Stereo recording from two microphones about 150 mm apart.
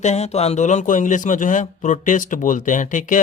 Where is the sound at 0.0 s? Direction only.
50° left (ahead or behind).